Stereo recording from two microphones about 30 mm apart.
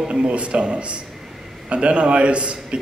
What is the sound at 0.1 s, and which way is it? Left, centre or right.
A man's voice, right.